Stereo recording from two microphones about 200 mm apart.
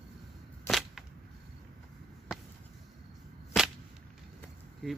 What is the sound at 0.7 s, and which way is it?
Whip, centre (ahead or behind).